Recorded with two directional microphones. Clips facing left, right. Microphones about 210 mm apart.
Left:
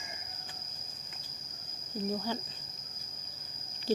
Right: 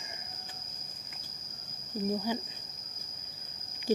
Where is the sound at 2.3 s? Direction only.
15° right (ahead or behind).